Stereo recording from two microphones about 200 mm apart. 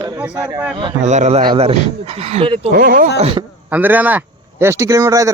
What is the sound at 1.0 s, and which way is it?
A man's voice, 35° right (ahead or behind).